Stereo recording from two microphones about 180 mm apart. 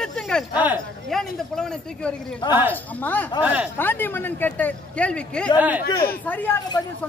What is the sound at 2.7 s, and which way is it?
Speech, 10° left (ahead or behind).